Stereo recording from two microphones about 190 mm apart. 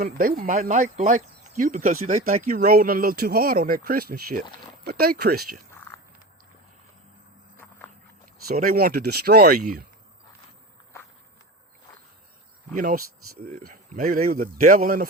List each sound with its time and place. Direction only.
0.0 s speech: 50° right (ahead or behind)
7.5 s walk: 10° left (ahead or behind)
8.4 s speech: 50° right (ahead or behind)
12.7 s speech: 45° right (ahead or behind)